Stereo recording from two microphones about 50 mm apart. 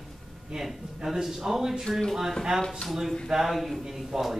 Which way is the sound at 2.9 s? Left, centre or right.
Centre.